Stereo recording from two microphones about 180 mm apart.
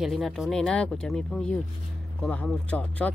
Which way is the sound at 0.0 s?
Centre (ahead or behind).